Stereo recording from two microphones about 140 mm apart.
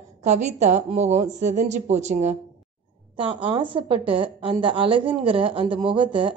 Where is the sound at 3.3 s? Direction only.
35° right (ahead or behind).